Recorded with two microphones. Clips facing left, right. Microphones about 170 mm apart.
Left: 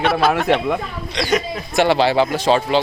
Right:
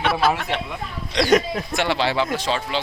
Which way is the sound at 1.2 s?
5° left (ahead or behind).